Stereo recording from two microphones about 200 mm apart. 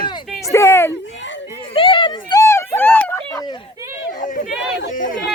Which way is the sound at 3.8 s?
15° right (ahead or behind).